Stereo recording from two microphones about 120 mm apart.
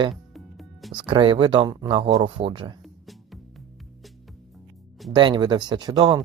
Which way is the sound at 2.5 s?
40° right (ahead or behind).